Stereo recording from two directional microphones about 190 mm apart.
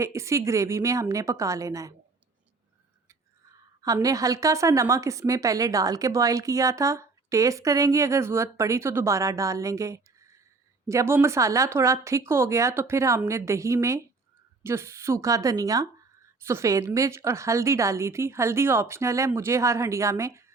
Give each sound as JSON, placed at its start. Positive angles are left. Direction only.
{"t": 0.0, "sound": "a woman's voice", "side_deg": -15}
{"t": 3.8, "sound": "a woman's voice", "side_deg": -15}